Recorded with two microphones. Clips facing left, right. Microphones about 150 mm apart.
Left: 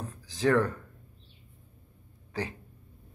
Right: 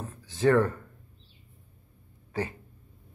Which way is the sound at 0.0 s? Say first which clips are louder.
Right 3 dB; centre (ahead or behind).